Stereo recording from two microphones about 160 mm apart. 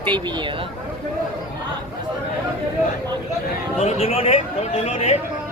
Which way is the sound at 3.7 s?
40° left (ahead or behind).